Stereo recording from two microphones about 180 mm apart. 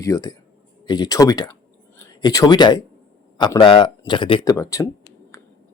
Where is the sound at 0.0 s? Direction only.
20° left (ahead or behind).